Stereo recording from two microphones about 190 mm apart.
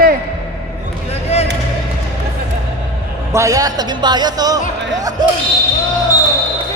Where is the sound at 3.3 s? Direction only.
15° right (ahead or behind).